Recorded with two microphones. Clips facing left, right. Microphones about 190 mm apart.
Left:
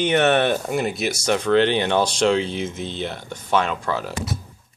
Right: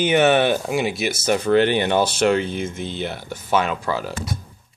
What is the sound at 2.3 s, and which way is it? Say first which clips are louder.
Speech: right 1 dB; 55° right (ahead or behind).